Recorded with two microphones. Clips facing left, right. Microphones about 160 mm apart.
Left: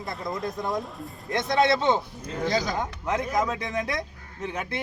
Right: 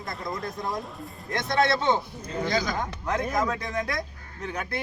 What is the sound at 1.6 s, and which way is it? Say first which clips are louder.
Speech: left 1 dB; 20° left (ahead or behind).